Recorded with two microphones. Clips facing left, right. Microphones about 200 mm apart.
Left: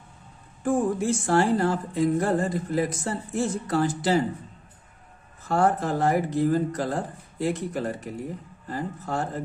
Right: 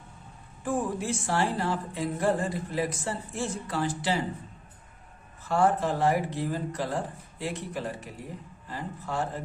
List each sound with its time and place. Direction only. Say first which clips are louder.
0.6 s speech: left 6 dB; 45° left (ahead or behind)
5.5 s speech: left 2 dB; 45° left (ahead or behind)